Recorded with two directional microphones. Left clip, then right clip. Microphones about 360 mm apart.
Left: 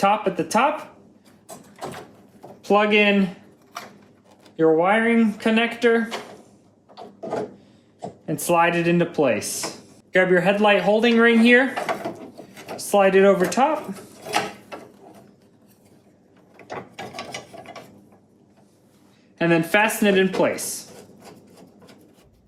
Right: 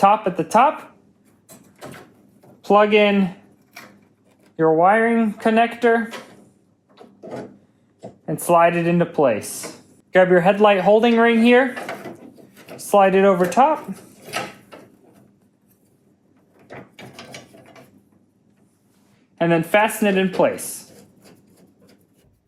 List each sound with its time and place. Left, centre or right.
0.0 s speech: centre
2.6 s speech: centre
4.5 s speech: centre
8.3 s speech: centre
12.9 s speech: centre
19.4 s speech: centre